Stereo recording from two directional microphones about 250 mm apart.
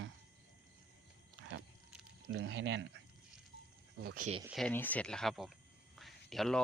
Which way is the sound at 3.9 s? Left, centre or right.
Right.